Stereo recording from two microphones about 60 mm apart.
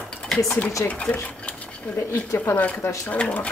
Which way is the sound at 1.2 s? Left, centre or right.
Left.